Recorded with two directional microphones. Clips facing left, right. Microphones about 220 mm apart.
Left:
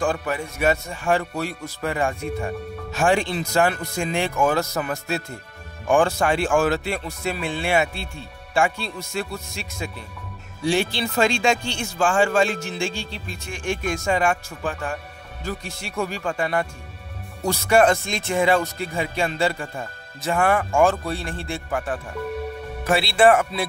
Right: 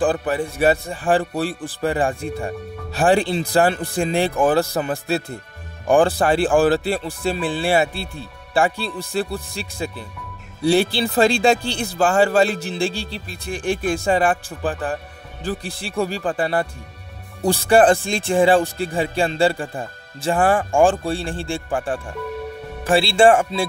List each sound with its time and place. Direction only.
0.0 s speech: 35° right (ahead or behind)